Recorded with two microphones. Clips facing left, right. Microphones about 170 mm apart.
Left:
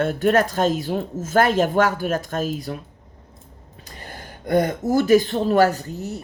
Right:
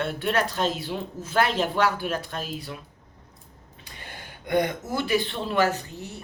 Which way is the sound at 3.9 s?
40° left (ahead or behind).